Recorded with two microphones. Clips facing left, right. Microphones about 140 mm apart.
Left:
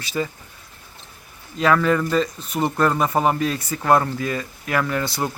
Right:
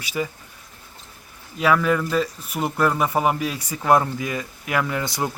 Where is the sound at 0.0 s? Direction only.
10° right (ahead or behind).